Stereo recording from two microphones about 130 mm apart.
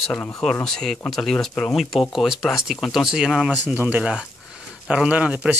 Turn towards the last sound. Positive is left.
turn(degrees=-10)  # may be behind; listen again after turning